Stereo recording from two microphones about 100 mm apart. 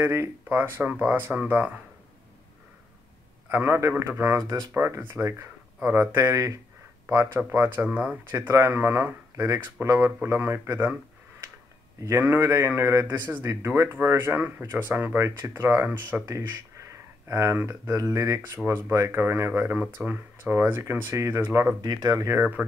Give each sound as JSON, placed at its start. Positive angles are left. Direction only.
{"t": 0.0, "sound": "a man's voice", "side_deg": -25}
{"t": 3.4, "sound": "a man's voice", "side_deg": -20}
{"t": 8.4, "sound": "a man's voice", "side_deg": -25}
{"t": 12.0, "sound": "a man's voice", "side_deg": -25}
{"t": 16.3, "sound": "a man's voice", "side_deg": -30}
{"t": 21.8, "sound": "speech", "side_deg": -40}